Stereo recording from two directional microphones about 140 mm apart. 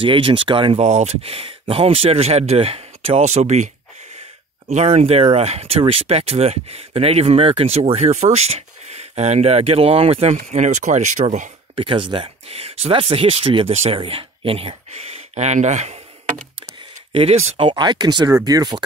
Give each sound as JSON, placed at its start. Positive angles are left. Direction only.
{"t": 0.0, "sound": "speech", "side_deg": -40}
{"t": 0.7, "sound": "speech", "side_deg": -55}
{"t": 11.7, "sound": "speech", "side_deg": -40}
{"t": 15.3, "sound": "speech", "side_deg": -55}
{"t": 17.1, "sound": "speech", "side_deg": -45}